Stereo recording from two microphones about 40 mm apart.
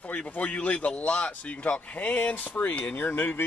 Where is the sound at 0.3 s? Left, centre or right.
Left.